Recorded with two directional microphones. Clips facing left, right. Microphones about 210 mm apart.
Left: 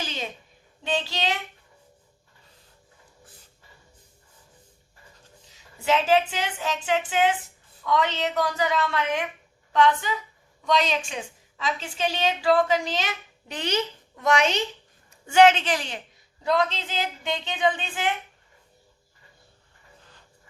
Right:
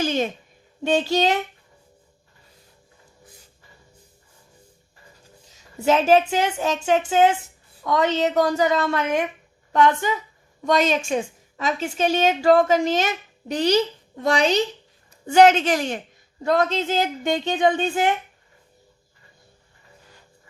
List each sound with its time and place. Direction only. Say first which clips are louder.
0.0 s a sound: right 11 dB; 50° right (ahead or behind)
0.8 s a woman's voice: right 9 dB; 45° right (ahead or behind)
5.8 s a woman's voice: right 5 dB; 45° right (ahead or behind)